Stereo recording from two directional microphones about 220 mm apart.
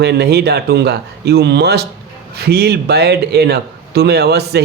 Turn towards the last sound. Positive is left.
turn(degrees=-45)  # may be behind; listen again after turning